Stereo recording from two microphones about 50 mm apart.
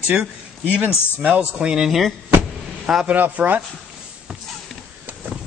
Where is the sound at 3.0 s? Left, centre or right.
Right.